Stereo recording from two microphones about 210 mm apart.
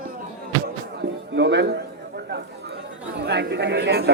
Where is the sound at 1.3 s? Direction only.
55° right (ahead or behind).